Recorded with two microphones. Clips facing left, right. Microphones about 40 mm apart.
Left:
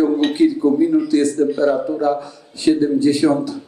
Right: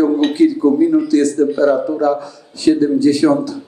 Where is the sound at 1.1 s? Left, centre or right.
Centre.